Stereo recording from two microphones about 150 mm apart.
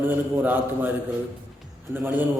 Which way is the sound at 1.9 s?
15° right (ahead or behind).